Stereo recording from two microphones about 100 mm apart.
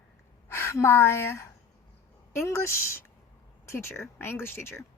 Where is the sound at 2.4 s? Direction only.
30° left (ahead or behind).